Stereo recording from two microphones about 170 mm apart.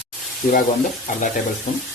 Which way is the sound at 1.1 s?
45° left (ahead or behind).